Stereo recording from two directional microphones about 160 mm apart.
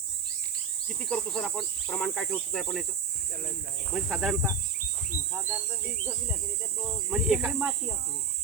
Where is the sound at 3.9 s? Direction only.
Centre (ahead or behind).